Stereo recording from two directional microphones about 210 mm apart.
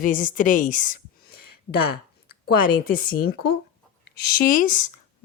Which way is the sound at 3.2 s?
50° left (ahead or behind).